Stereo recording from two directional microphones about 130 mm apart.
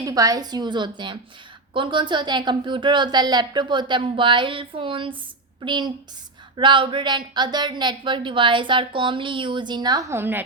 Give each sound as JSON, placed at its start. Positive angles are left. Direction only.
{"t": 0.0, "sound": "speech", "side_deg": -25}